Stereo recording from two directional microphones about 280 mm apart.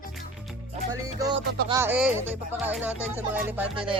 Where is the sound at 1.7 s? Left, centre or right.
Centre.